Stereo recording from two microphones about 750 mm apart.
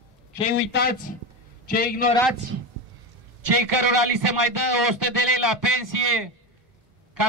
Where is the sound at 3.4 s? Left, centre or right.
Right.